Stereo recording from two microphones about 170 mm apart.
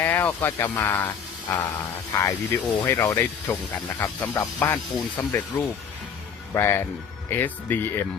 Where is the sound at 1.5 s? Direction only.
20° left (ahead or behind).